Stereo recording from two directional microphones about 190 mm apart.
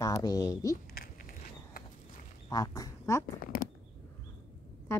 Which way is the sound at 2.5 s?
20° left (ahead or behind).